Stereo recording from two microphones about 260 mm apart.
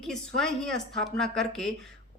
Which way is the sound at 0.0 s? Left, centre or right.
Centre.